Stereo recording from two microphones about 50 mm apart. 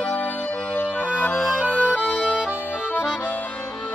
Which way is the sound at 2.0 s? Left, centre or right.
Left.